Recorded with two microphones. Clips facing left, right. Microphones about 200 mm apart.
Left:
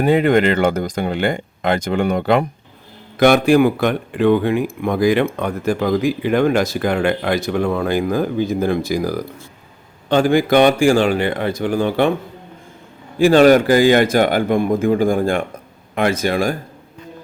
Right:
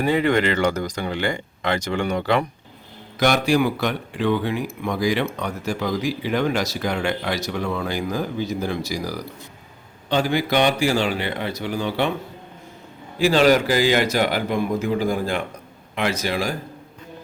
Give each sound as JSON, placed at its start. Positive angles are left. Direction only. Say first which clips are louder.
{"t": 0.0, "sound": "speech", "louder": "left 5 dB", "side_deg": 55}
{"t": 13.1, "sound": "speech", "louder": "left 6 dB", "side_deg": 50}